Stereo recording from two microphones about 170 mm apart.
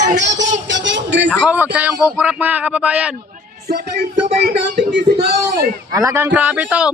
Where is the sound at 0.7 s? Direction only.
90° right.